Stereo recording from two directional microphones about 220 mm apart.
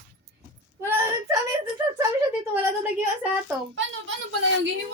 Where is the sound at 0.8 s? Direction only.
10° right (ahead or behind).